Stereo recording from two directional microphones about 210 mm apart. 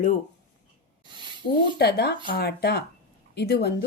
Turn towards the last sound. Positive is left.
turn(degrees=50)  # may be behind; listen again after turning